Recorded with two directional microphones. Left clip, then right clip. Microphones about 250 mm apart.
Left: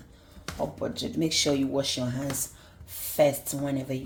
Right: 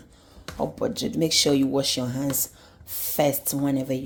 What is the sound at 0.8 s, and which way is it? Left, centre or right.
Speech, right.